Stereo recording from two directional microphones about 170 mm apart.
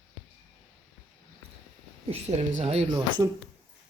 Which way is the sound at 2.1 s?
40° right (ahead or behind).